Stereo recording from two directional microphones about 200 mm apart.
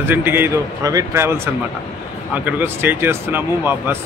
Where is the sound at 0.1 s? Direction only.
10° right (ahead or behind).